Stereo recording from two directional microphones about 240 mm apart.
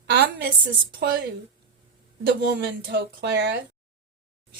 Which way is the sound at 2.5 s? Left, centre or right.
Right.